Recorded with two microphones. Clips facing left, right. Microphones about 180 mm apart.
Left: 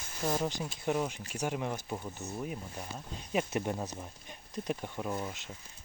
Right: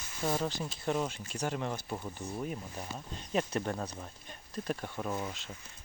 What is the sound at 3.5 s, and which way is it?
Speech, 15° left (ahead or behind).